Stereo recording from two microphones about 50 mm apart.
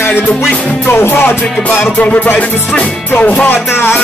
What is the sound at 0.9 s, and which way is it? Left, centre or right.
Music, left.